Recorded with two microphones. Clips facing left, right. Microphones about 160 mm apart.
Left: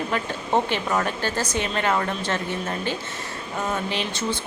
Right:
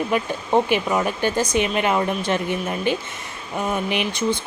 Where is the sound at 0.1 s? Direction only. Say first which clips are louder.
Right 3 dB; 10° right (ahead or behind).